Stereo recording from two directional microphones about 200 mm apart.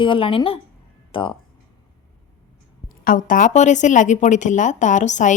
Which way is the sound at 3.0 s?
40° left (ahead or behind).